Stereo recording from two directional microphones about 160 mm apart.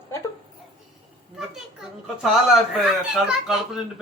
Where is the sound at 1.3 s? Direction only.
Centre (ahead or behind).